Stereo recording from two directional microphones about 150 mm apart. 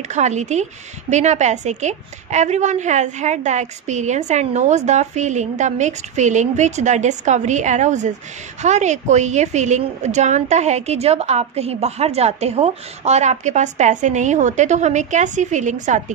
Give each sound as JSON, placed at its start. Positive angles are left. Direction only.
{"t": 0.1, "sound": "a woman's voice", "side_deg": -50}